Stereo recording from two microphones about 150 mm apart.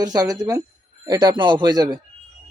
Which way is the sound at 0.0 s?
25° right (ahead or behind).